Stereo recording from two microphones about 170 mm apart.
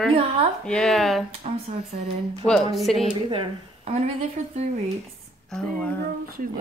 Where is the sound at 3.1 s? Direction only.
30° right (ahead or behind).